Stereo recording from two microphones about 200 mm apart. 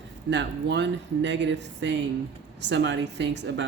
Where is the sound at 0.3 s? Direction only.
60° right (ahead or behind).